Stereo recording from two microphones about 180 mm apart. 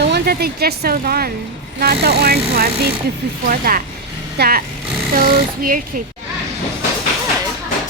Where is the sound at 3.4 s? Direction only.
55° right (ahead or behind).